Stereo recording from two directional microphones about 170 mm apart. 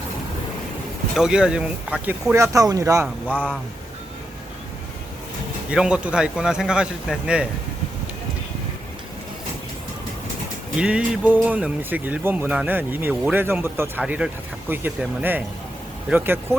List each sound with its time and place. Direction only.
1.1 s a man's voice: 5° right (ahead or behind)
2.3 s speech: 20° right (ahead or behind)
3.2 s speech: 5° left (ahead or behind)
5.7 s a man's voice: 5° right (ahead or behind)
10.8 s a man's voice: 5° right (ahead or behind)